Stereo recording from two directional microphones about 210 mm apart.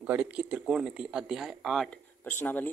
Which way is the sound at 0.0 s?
5° right (ahead or behind).